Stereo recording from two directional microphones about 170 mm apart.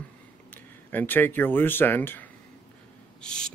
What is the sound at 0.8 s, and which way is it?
Speech, 10° left (ahead or behind).